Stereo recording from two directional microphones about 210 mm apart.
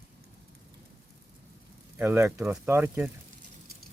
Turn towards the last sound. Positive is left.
turn(degrees=-5)  # may be behind; listen again after turning